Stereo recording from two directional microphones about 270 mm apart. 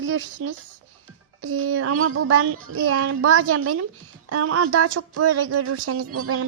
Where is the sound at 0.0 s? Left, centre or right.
Right.